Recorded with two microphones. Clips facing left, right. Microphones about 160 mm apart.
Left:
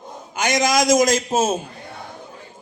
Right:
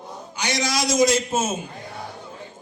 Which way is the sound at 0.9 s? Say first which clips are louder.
Right 1 dB; 90° left.